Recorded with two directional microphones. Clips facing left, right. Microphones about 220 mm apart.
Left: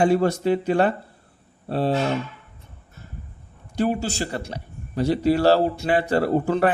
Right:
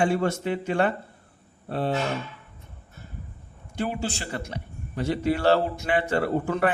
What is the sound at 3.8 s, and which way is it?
A man's voice, 40° left (ahead or behind).